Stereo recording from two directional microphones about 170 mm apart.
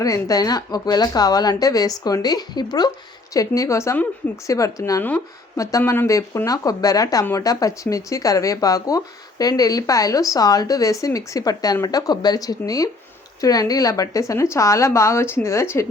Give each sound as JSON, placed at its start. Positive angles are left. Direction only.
{"t": 0.0, "sound": "a woman's voice", "side_deg": 20}